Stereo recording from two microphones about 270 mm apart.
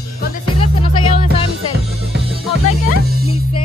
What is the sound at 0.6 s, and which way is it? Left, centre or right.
Music, left.